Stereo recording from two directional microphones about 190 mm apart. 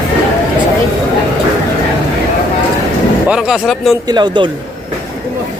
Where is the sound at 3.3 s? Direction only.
5° right (ahead or behind).